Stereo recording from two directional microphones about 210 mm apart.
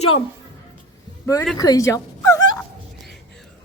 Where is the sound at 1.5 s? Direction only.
15° left (ahead or behind).